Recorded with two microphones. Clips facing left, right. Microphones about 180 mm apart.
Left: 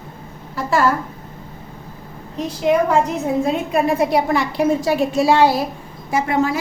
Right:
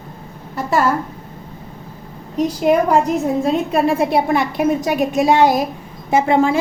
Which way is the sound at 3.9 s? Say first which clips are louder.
Even; 25° right (ahead or behind).